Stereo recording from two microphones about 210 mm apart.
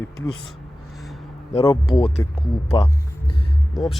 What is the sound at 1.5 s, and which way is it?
Speech, 25° left (ahead or behind).